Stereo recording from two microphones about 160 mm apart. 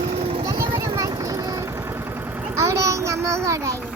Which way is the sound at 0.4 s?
20° right (ahead or behind).